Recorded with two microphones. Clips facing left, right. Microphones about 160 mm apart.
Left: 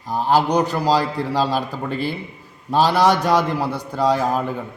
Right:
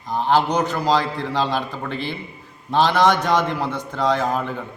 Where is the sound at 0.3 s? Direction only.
10° left (ahead or behind).